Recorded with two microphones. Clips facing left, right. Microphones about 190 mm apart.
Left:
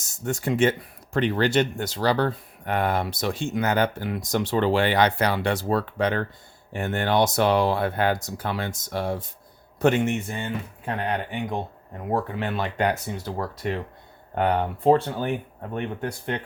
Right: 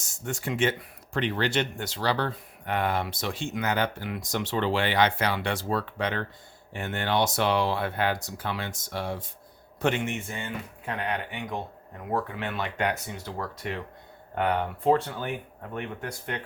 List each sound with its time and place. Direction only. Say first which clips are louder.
0.1 s speech: left 6 dB; 40° left (ahead or behind)